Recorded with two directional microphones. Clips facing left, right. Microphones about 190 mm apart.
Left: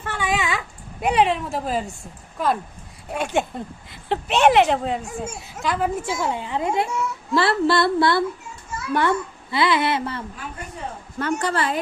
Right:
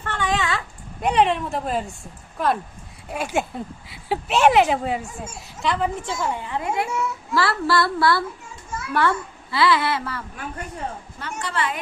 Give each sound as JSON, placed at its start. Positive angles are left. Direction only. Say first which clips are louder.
{"t": 0.0, "sound": "dog", "louder": "even", "side_deg": 10}
{"t": 1.0, "sound": "a child's voice", "louder": "even", "side_deg": 5}
{"t": 11.2, "sound": "a woman's voice", "louder": "left 5 dB", "side_deg": 45}